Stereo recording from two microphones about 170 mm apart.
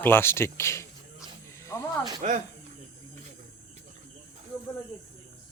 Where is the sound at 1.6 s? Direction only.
15° left (ahead or behind).